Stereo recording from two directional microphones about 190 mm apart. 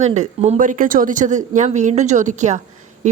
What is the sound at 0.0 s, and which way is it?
Speech, 35° right (ahead or behind).